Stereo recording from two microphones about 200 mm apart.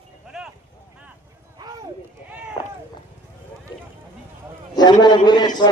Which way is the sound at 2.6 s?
25° left (ahead or behind).